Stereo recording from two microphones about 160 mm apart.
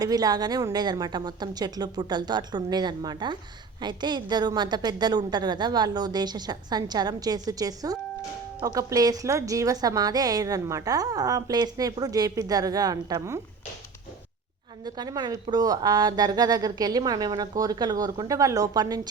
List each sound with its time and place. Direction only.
0.0 s a woman's voice: 25° right (ahead or behind)
14.8 s a woman's voice: 25° right (ahead or behind)